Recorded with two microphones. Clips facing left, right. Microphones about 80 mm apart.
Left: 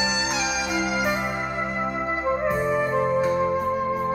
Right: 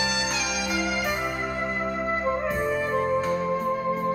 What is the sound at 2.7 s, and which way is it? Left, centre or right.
Music, centre.